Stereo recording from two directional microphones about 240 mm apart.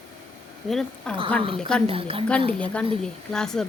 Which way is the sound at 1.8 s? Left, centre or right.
Right.